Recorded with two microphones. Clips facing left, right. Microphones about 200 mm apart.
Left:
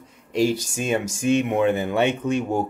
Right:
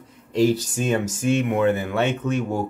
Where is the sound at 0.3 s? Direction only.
10° left (ahead or behind).